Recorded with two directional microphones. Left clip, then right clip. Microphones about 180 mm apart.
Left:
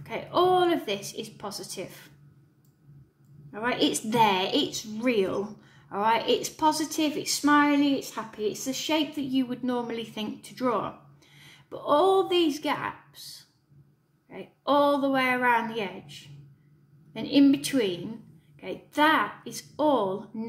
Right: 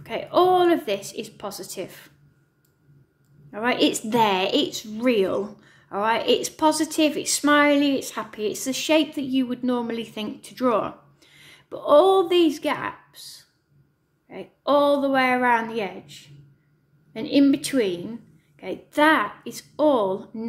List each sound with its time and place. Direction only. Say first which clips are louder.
0.0 s a woman's voice: right 5 dB; 25° right (ahead or behind)
3.5 s a woman's voice: right 5 dB; 30° right (ahead or behind)